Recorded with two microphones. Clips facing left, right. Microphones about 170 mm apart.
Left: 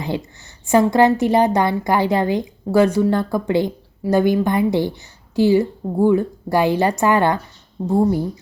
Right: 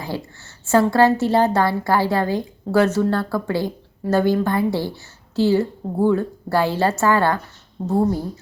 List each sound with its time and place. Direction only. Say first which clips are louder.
0.0 s a woman's voice: left 4 dB; 20° left (ahead or behind)